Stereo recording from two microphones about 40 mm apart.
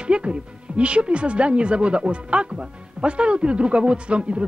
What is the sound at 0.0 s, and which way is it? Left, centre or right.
Speech, right.